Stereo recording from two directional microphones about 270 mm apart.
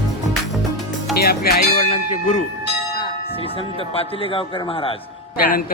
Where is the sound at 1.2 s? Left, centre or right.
Left.